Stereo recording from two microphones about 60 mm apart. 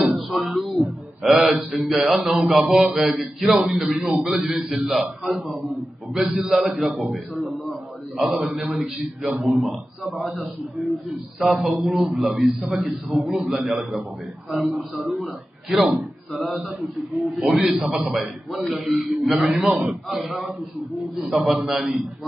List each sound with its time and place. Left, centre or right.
0.0 s a sound: centre
1.7 s a man's voice: centre
8.7 s a man's voice: centre